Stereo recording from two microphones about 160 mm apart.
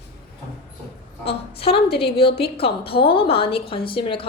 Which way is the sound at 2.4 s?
35° left (ahead or behind).